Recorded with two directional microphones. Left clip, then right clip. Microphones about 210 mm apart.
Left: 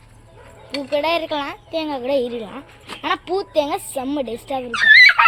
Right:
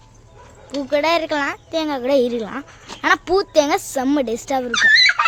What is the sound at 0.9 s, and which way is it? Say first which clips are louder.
A child's voice: right 2 dB; 15° right (ahead or behind).